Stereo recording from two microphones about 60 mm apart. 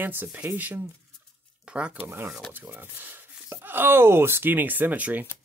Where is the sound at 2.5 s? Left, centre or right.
Right.